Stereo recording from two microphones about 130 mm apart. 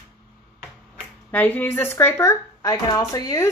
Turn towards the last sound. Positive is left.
turn(degrees=25)  # may be behind; listen again after turning